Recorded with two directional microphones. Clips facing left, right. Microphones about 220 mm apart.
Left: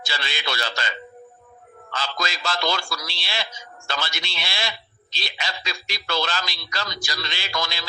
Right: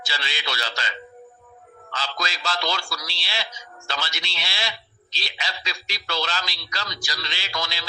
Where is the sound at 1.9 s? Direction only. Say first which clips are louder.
Left 2 dB; 55° left (ahead or behind).